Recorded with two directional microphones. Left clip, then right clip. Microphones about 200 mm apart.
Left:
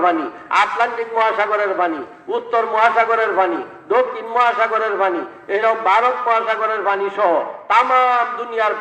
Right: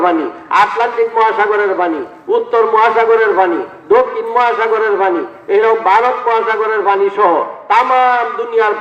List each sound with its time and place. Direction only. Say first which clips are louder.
0.0 s a man's voice: right 4 dB; 25° left (ahead or behind)